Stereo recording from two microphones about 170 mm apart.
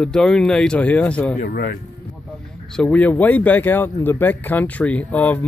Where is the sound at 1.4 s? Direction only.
55° left (ahead or behind).